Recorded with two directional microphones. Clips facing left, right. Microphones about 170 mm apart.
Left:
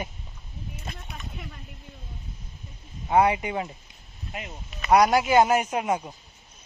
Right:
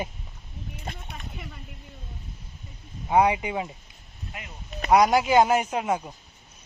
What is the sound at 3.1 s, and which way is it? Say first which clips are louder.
Speech: even; 10° right (ahead or behind).